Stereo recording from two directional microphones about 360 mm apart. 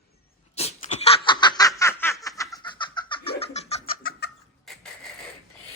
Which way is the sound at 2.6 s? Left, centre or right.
Centre.